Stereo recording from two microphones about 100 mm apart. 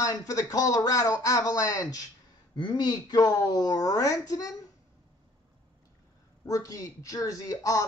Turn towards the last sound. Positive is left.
turn(degrees=35)  # may be behind; listen again after turning